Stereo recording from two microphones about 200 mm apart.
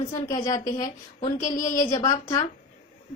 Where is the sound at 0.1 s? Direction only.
20° left (ahead or behind).